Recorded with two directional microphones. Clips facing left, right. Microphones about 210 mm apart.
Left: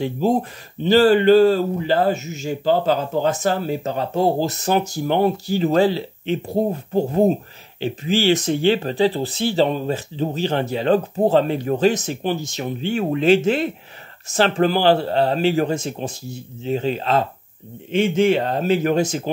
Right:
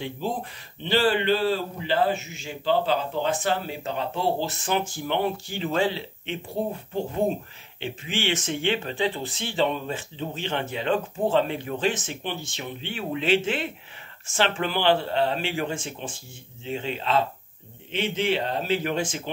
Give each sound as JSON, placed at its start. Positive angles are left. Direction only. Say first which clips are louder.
{"t": 0.0, "sound": "speech", "louder": "left 10 dB", "side_deg": 45}